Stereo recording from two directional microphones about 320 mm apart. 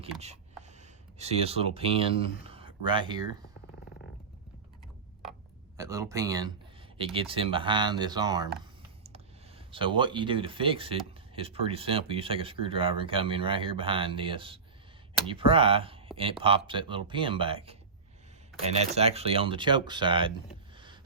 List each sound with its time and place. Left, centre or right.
0.8 s speech: centre
5.7 s speech: centre
20.7 s a sound: centre